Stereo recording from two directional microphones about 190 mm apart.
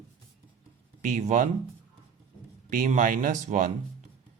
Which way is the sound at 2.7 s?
45° right (ahead or behind).